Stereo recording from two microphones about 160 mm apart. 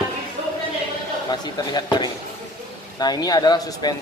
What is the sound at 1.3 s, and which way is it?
Speech, 25° left (ahead or behind).